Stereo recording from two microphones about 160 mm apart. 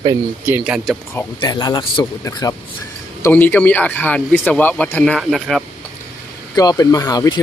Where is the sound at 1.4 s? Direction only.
25° left (ahead or behind); by 5.6 s centre (ahead or behind).